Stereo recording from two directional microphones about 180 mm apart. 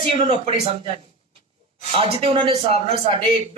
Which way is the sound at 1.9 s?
30° right (ahead or behind).